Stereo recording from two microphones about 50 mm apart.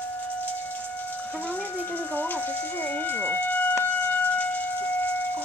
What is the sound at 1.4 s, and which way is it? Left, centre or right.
Speech, left.